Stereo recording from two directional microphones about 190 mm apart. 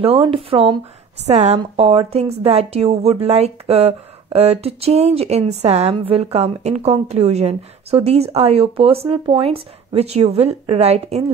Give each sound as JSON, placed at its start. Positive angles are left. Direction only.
{"t": 0.0, "sound": "speech", "side_deg": -30}